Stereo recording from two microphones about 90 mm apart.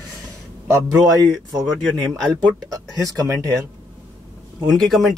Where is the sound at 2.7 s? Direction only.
40° right (ahead or behind).